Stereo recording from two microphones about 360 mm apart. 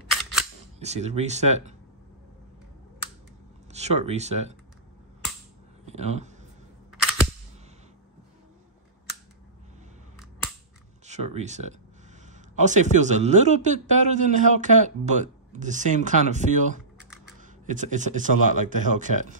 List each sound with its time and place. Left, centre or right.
0.1 s single-lens reflex camera: centre
0.7 s a man's voice: centre
3.7 s speech: centre
5.9 s speech: centre
6.9 s cap gun: centre
11.1 s a man's voice: centre
17.4 s a sound: right
18.8 s a man's voice: right